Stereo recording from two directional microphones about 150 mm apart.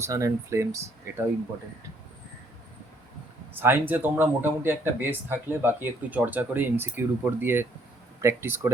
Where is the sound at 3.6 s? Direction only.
15° right (ahead or behind).